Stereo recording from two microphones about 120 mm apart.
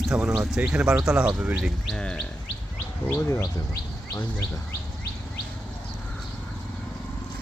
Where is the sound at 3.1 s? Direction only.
30° left (ahead or behind).